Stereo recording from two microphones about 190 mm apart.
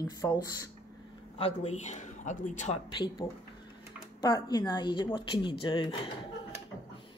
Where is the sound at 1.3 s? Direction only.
30° left (ahead or behind).